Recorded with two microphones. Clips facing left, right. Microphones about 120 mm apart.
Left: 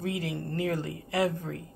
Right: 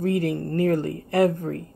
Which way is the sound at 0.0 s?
50° right (ahead or behind).